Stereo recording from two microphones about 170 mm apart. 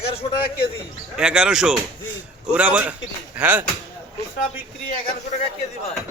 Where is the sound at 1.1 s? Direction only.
5° right (ahead or behind).